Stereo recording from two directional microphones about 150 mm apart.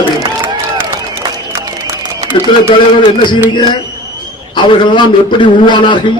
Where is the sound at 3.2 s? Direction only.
30° left (ahead or behind).